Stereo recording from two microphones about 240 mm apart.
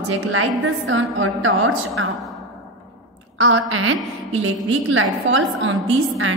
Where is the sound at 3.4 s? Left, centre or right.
Right.